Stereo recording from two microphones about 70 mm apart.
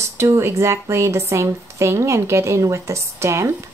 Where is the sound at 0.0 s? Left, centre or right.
Right.